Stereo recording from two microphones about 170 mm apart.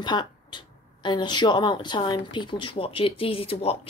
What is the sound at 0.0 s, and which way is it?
Speech, 25° left (ahead or behind).